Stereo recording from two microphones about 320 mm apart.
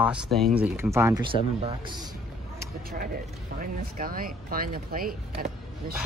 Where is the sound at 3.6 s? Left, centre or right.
Right.